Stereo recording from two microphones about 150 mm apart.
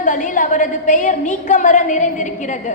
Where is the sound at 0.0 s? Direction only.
60° left (ahead or behind).